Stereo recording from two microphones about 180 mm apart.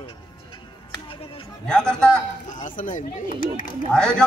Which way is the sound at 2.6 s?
45° left (ahead or behind).